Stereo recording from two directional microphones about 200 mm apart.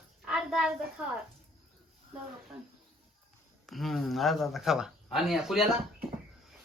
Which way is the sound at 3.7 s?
Centre (ahead or behind).